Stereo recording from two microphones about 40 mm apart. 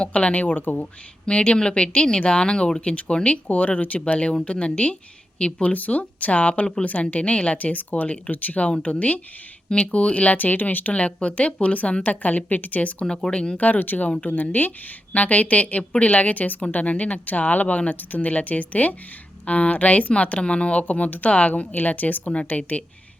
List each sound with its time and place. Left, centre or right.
0.0 s speech: left
0.4 s speech: left
1.3 s speech: left
5.7 s speech: left
10.9 s speech: left
13.1 s speech: left
13.6 s speech: left